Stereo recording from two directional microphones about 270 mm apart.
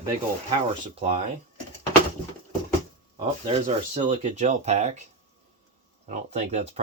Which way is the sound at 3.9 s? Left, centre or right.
Right.